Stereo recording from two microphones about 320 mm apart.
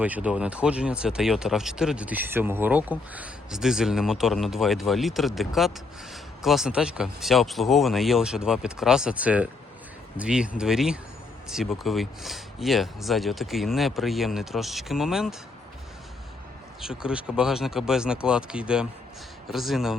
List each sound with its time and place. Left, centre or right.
0.0 s speech: centre
16.8 s speech: centre